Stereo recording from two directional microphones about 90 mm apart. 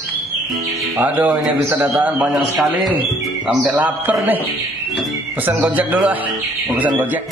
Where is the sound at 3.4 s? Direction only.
15° right (ahead or behind).